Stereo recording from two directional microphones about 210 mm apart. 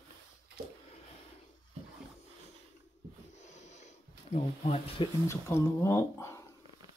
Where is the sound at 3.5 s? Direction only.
35° left (ahead or behind).